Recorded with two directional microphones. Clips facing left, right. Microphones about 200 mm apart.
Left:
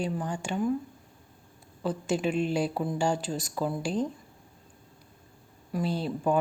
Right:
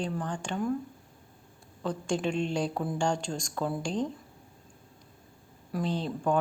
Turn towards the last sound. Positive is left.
turn(degrees=10)  # may be behind; listen again after turning